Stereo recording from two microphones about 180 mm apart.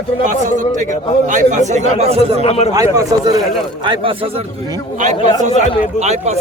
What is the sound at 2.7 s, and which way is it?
A man's voice, 20° right (ahead or behind).